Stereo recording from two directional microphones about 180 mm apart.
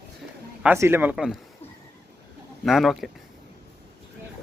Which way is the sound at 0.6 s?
10° right (ahead or behind).